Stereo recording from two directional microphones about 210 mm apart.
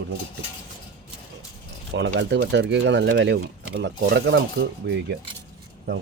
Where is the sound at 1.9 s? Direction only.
55° right (ahead or behind).